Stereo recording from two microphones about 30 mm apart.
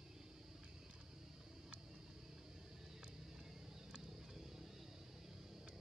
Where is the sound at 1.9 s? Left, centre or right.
Centre.